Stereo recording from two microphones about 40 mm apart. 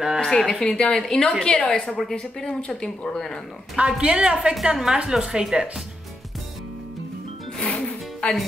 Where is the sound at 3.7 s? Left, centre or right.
Right.